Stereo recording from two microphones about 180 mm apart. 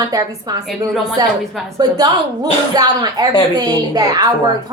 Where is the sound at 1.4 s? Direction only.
Centre (ahead or behind).